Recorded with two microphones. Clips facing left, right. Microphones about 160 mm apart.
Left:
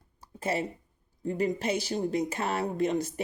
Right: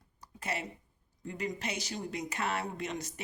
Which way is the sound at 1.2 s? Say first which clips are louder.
Left 9 dB; 30° left (ahead or behind).